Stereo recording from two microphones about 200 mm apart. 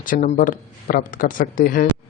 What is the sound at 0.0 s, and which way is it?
Speech, 40° left (ahead or behind).